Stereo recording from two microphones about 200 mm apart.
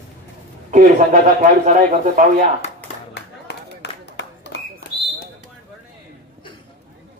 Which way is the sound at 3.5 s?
60° left (ahead or behind).